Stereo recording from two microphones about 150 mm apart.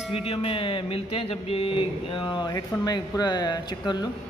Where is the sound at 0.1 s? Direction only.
40° left (ahead or behind).